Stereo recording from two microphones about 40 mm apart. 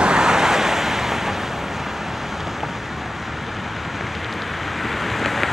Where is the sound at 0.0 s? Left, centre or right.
Centre.